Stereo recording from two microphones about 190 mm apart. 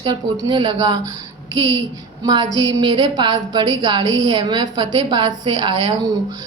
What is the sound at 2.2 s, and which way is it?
A woman's voice, 20° right (ahead or behind).